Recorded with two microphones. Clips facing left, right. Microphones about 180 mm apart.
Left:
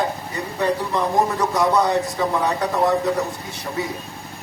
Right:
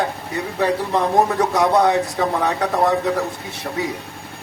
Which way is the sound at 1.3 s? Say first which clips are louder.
Right 2 dB; 60° right (ahead or behind).